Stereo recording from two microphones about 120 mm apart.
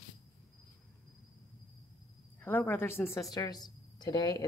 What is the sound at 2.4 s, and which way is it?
A woman's voice, 15° left (ahead or behind).